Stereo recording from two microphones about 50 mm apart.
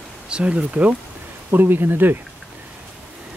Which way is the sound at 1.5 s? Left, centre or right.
Right.